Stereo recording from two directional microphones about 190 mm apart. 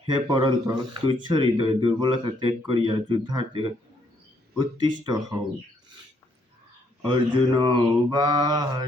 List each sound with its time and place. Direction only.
0.1 s speech: 20° right (ahead or behind)
7.0 s speech: 25° right (ahead or behind)